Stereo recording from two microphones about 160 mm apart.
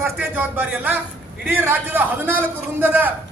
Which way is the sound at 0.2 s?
10° right (ahead or behind).